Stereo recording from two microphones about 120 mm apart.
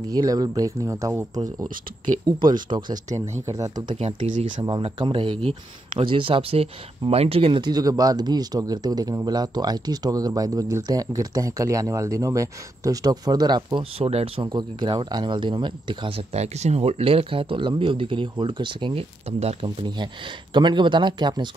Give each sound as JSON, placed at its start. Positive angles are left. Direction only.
{"t": 0.1, "sound": "speech", "side_deg": -30}
{"t": 3.9, "sound": "speech", "side_deg": -65}
{"t": 4.6, "sound": "speech", "side_deg": -40}
{"t": 13.9, "sound": "speech", "side_deg": -55}
{"t": 14.5, "sound": "speech", "side_deg": -40}